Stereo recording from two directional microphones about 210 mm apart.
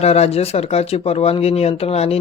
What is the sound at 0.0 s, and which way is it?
Speech, 30° left (ahead or behind).